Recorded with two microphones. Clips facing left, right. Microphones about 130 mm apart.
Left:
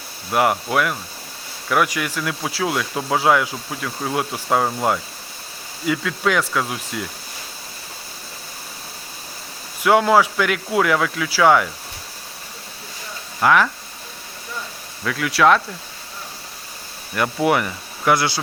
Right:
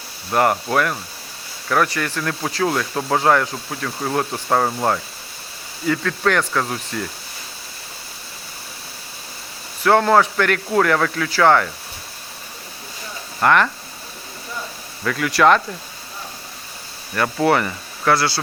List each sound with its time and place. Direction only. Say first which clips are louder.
0.3 s speech: right 1 dB; 5° left (ahead or behind)
9.8 s speech: even; 10° left (ahead or behind)
13.4 s speech: even; 5° left (ahead or behind)
15.0 s speech: right 1 dB; centre (ahead or behind)
17.4 s speech: right 2 dB; 5° left (ahead or behind)